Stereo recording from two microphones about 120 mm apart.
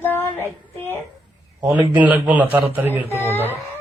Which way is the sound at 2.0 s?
15° right (ahead or behind).